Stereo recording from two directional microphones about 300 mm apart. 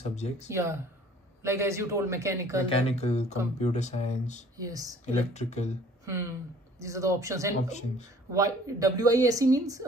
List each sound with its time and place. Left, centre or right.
0.1 s speech: left
0.5 s speech: centre
2.7 s speech: centre
4.6 s speech: centre
5.0 s speech: left
6.8 s speech: centre